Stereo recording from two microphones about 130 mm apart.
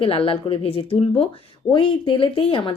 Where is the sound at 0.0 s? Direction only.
45° left (ahead or behind).